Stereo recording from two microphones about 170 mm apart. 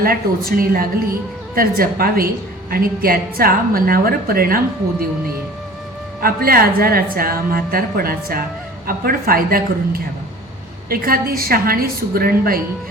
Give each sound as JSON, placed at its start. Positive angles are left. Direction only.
{"t": 0.0, "sound": "a woman's voice", "side_deg": -60}
{"t": 6.2, "sound": "a woman's voice", "side_deg": -60}